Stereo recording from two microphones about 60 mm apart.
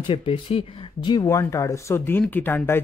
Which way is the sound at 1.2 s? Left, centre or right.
Left.